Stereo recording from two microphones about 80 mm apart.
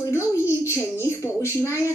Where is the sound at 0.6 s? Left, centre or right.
Left.